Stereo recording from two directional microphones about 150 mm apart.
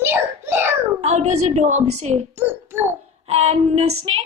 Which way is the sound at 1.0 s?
45° right (ahead or behind).